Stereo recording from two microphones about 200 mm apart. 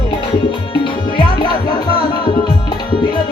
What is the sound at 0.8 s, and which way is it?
Music, 25° left (ahead or behind).